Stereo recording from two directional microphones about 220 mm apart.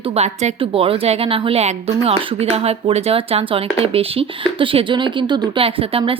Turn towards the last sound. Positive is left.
turn(degrees=-25)  # may be behind; listen again after turning